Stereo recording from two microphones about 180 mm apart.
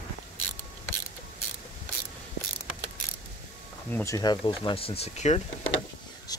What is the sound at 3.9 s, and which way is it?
Speech, 15° left (ahead or behind).